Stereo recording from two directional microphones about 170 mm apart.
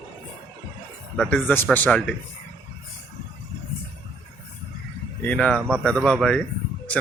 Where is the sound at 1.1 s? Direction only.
10° left (ahead or behind).